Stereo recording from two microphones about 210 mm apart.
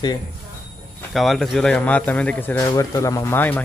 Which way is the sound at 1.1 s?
Centre (ahead or behind).